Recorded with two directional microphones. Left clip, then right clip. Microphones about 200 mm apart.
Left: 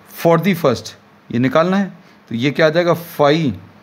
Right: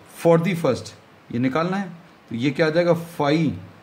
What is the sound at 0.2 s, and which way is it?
Speech, 40° left (ahead or behind).